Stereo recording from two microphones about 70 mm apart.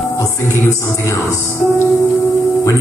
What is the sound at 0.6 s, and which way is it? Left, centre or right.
Music, left.